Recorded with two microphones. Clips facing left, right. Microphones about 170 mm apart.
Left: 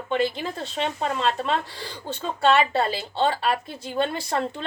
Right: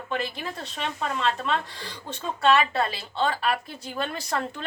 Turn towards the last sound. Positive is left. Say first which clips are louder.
# left 3 dB
turn(degrees=30)  # may be behind; listen again after turning